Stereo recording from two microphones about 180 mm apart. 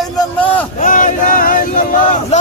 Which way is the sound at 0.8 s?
45° left (ahead or behind).